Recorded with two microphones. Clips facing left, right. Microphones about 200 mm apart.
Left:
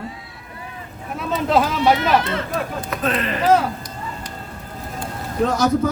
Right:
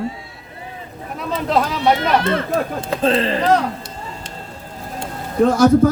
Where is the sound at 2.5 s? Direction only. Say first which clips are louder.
Right 4 dB; 30° right (ahead or behind).